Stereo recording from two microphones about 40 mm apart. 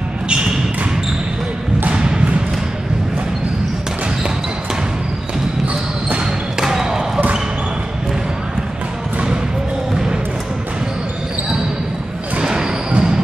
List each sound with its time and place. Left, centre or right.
6.6 s basketball bounce: centre
12.9 s train: centre